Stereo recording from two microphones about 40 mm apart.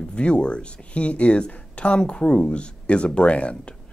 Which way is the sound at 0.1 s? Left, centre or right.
Left.